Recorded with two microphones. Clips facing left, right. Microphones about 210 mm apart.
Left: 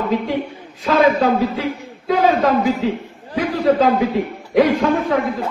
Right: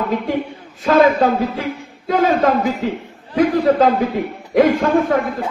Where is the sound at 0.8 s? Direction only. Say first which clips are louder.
Right 2 dB; 50° right (ahead or behind).